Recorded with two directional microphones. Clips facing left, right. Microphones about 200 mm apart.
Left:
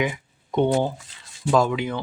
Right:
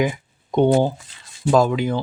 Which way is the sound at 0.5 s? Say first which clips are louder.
Right 4 dB; 35° right (ahead or behind).